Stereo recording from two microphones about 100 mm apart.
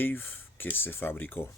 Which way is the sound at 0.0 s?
20° left (ahead or behind).